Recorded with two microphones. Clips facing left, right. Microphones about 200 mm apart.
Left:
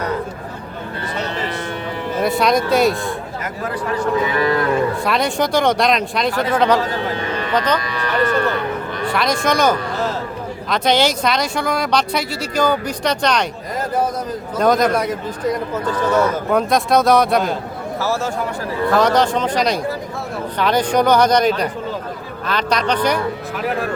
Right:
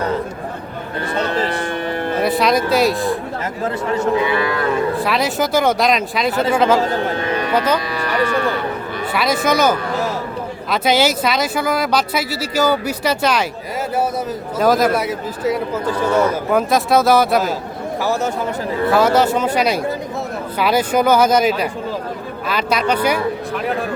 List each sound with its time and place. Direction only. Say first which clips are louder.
1.5 s music: right 4 dB; 55° right (ahead or behind)
2.2 s a man's voice: left 1 dB; centre (ahead or behind)
3.6 s a man's voice: right 2 dB; 25° right (ahead or behind)
4.9 s a man's voice: even; centre (ahead or behind)
14.6 s a man's voice: even; 5° right (ahead or behind)
18.0 s speech: right 2 dB; 15° right (ahead or behind)
18.9 s a man's voice: right 1 dB; 5° right (ahead or behind)